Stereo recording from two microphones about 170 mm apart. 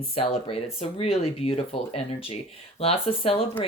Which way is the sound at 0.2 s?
35° left (ahead or behind).